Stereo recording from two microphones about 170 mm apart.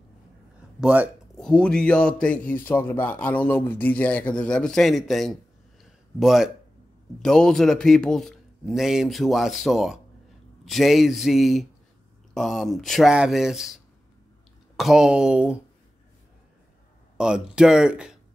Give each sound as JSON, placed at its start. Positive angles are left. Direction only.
{"t": 0.7, "sound": "speech", "side_deg": -10}
{"t": 1.3, "sound": "a man's voice", "side_deg": 5}
{"t": 5.8, "sound": "a sound", "side_deg": 0}
{"t": 7.2, "sound": "speech", "side_deg": 5}
{"t": 14.8, "sound": "speech", "side_deg": 0}
{"t": 17.2, "sound": "speech", "side_deg": -5}